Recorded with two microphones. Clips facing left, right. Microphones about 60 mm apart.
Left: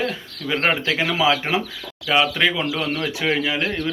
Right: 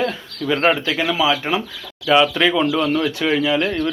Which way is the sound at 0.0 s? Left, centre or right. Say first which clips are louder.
Right 3 dB; centre.